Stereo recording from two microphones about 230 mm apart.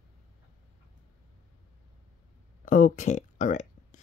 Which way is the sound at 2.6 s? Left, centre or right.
Left.